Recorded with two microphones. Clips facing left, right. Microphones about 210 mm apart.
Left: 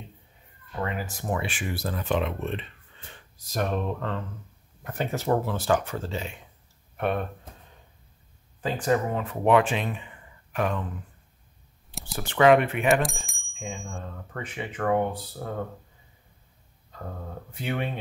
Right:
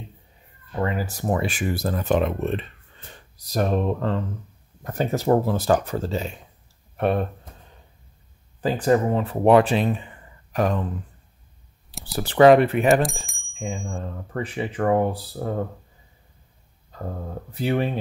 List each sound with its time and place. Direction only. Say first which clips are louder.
0.7 s speech: right 6 dB; 35° right (ahead or behind)
8.5 s speech: right 5 dB; 35° right (ahead or behind)
12.2 s speech: right 5 dB; 35° right (ahead or behind)
13.0 s bicycle bell: right 4 dB; centre (ahead or behind)
13.6 s speech: right 6 dB; 35° right (ahead or behind)
17.0 s speech: right 5 dB; 35° right (ahead or behind)